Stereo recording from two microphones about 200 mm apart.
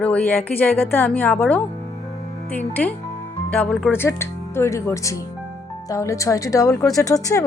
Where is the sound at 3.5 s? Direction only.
5° left (ahead or behind).